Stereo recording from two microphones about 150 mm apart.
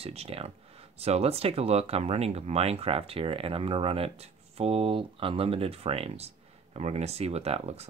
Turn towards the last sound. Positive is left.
turn(degrees=-45)  # may be behind; listen again after turning